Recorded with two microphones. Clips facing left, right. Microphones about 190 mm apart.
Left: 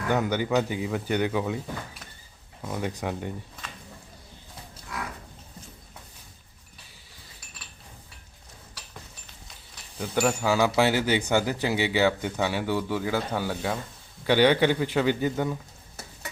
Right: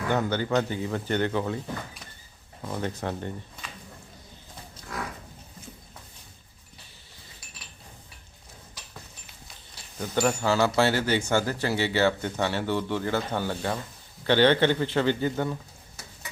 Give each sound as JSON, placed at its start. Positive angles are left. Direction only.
{"t": 0.1, "sound": "speech", "side_deg": 15}
{"t": 10.0, "sound": "speech", "side_deg": 10}